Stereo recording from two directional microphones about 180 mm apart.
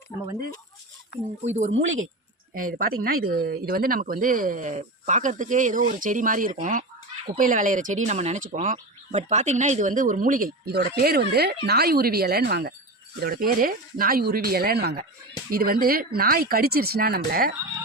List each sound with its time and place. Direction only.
1.1 s speech: 65° left (ahead or behind)
1.7 s a woman's voice: 90° right
2.6 s speech: 50° right (ahead or behind)